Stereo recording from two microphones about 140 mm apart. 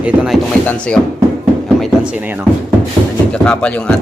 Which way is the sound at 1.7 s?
5° right (ahead or behind).